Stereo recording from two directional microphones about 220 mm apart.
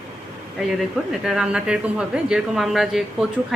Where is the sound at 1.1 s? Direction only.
Centre (ahead or behind).